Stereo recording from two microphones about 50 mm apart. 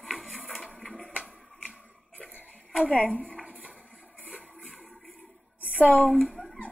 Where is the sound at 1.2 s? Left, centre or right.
Right.